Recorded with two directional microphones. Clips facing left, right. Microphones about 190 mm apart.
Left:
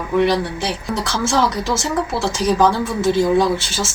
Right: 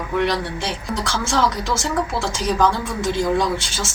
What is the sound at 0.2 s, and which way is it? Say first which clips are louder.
Speech: left 5 dB; 5° left (ahead or behind).